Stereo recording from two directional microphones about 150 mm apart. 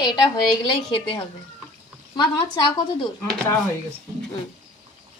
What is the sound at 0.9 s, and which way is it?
A woman's voice, 35° left (ahead or behind).